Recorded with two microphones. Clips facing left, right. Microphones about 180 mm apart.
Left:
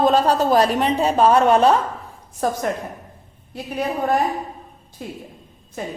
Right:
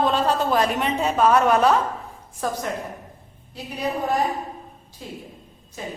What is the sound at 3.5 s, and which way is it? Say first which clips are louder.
Speech: left 4 dB; 55° left (ahead or behind).